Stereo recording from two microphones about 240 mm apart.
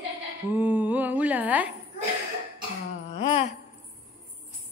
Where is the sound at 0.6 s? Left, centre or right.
Centre.